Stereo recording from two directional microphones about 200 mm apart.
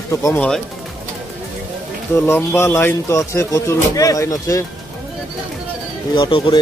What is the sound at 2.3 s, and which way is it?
Speech, 15° left (ahead or behind).